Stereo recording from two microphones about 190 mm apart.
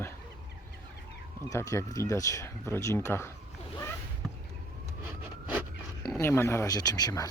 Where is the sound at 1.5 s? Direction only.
15° left (ahead or behind).